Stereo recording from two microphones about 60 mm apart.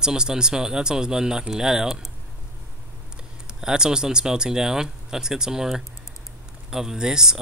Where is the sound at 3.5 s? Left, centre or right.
Centre.